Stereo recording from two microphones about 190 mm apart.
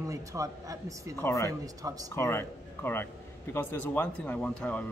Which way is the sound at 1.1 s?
15° left (ahead or behind).